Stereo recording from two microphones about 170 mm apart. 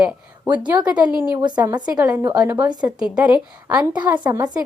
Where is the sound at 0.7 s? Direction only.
25° right (ahead or behind).